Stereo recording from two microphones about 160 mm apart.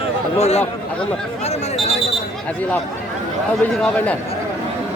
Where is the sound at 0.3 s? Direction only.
45° left (ahead or behind).